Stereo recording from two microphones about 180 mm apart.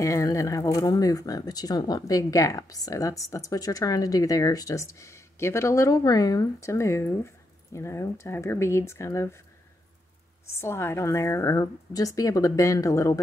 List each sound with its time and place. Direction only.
0.0 s a woman's voice: 15° left (ahead or behind)
10.4 s a woman's voice: 15° left (ahead or behind)